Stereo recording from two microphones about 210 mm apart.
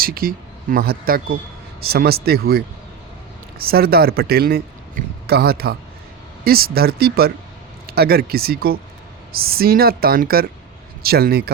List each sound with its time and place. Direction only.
0.0 s a woman's voice: 45° right (ahead or behind)